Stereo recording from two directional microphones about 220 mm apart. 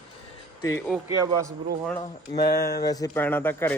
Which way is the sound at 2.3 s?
45° left (ahead or behind).